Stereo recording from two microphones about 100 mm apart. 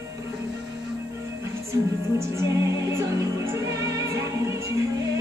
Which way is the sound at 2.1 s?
30° right (ahead or behind).